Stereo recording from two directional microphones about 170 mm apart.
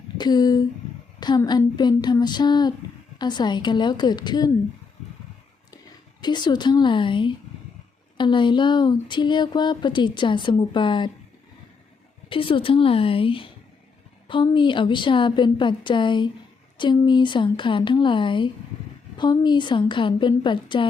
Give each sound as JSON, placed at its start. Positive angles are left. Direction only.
{"t": 0.2, "sound": "speech", "side_deg": 25}
{"t": 6.2, "sound": "speech", "side_deg": 25}
{"t": 12.3, "sound": "a woman's voice", "side_deg": 30}